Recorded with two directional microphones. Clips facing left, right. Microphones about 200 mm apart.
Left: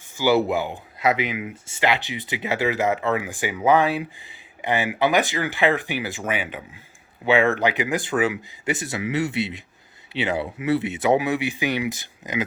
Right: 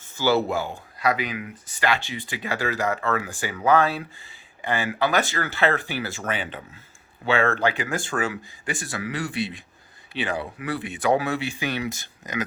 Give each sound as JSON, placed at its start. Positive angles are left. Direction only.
{"t": 0.2, "sound": "speech", "side_deg": 15}